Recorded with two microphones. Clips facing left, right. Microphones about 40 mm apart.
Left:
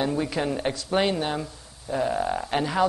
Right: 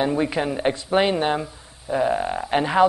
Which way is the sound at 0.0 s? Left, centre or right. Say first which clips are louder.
Right 4 dB; right.